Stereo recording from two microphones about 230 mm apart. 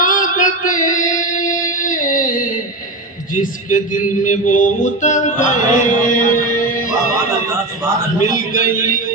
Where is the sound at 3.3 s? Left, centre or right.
Left.